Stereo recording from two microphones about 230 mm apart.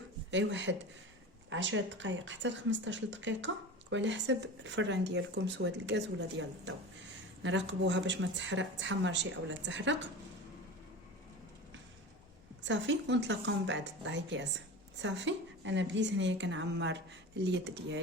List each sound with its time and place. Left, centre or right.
0.3 s speech: right
7.4 s speech: right
12.6 s speech: right